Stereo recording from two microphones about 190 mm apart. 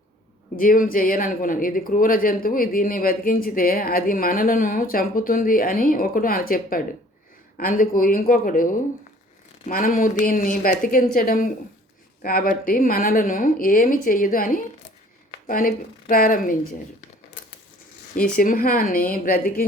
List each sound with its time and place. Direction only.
0.5 s speech: 50° left (ahead or behind)
18.3 s speech: 50° left (ahead or behind)